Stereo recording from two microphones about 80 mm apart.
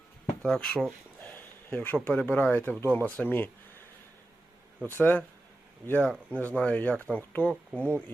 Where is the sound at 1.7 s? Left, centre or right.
Left.